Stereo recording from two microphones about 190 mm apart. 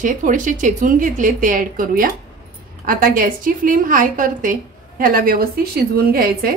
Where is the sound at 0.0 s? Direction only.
45° right (ahead or behind).